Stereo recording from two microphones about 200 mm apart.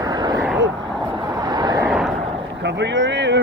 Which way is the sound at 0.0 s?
20° right (ahead or behind).